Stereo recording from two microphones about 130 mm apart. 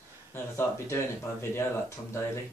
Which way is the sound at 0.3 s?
20° left (ahead or behind).